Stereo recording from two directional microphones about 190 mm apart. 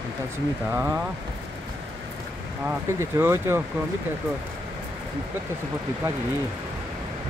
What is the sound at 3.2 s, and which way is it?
Speech, 15° right (ahead or behind).